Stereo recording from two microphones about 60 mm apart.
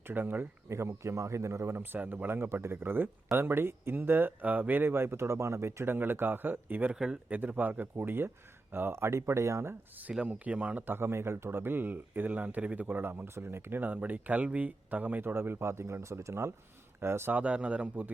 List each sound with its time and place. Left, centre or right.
0.1 s speech: right
0.7 s speech: right
1.8 s speech: right
6.9 s speech: centre
7.3 s speech: right
10.0 s speech: centre
12.9 s speech: right
17.3 s speech: right